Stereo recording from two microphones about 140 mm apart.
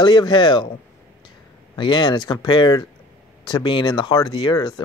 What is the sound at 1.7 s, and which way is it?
Speech, 35° left (ahead or behind).